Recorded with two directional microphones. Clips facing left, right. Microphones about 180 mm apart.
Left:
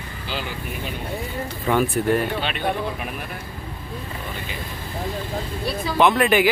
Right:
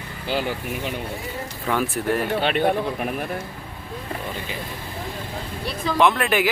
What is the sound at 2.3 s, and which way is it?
Speech, 50° right (ahead or behind).